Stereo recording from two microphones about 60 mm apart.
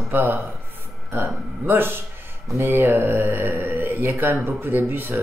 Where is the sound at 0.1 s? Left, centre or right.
Right.